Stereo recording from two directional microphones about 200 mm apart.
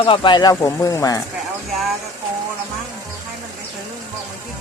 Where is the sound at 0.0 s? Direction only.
25° left (ahead or behind).